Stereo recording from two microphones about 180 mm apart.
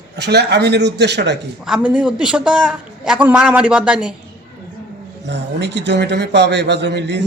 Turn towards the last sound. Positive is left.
turn(degrees=-75)  # may be behind; listen again after turning